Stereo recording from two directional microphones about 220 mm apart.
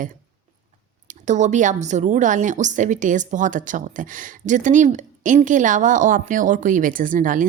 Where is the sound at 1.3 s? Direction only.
35° right (ahead or behind).